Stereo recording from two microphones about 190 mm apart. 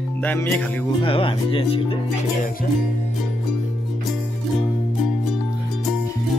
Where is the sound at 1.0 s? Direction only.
30° left (ahead or behind).